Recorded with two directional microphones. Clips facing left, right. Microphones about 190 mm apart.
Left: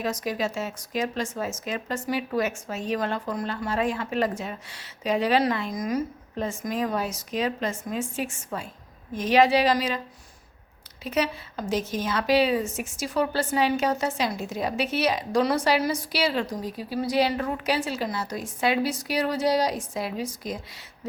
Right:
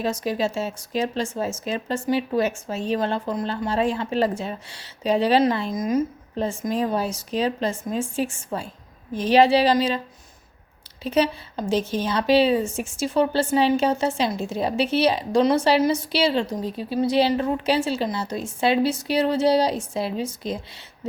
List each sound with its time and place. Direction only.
0.0 s a woman's voice: 30° right (ahead or behind)
11.0 s a woman's voice: 30° right (ahead or behind)